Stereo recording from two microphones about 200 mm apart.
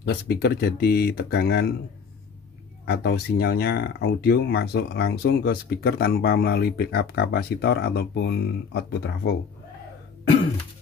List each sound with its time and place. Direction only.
0.0 s speech: 55° left (ahead or behind)
2.8 s speech: 55° left (ahead or behind)